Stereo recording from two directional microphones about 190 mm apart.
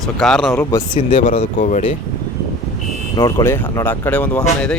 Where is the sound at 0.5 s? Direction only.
15° left (ahead or behind).